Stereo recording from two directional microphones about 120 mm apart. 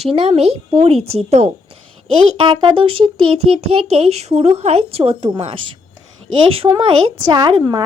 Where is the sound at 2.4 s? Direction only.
40° right (ahead or behind).